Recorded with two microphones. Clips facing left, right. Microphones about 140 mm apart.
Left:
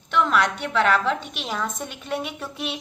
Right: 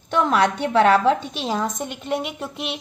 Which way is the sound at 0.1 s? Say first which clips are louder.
Right 3 dB; 40° right (ahead or behind).